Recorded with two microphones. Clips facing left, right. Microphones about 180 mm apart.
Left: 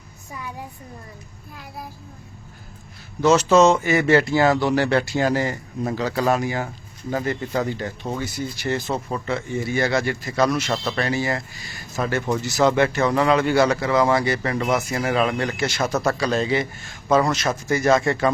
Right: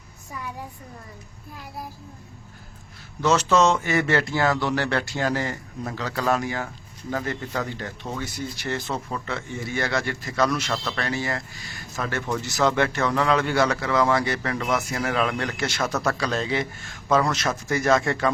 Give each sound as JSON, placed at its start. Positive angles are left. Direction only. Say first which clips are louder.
{"t": 3.2, "sound": "speech", "louder": "left 5 dB", "side_deg": 5}
{"t": 8.9, "sound": "a man's voice", "louder": "left 4 dB", "side_deg": 15}